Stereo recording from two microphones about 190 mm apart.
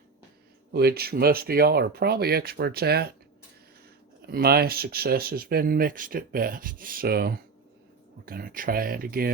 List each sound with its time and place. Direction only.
0.7 s speech: 55° right (ahead or behind)
4.3 s speech: 55° right (ahead or behind)